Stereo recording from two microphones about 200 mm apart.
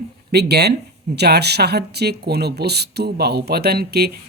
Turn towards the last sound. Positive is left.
turn(degrees=-50)  # may be behind; listen again after turning